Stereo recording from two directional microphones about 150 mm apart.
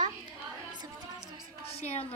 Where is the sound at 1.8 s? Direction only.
45° left (ahead or behind).